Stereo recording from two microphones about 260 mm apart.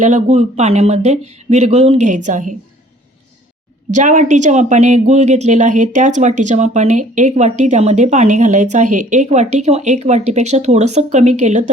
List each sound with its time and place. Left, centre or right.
0.0 s speech: right
3.9 s speech: right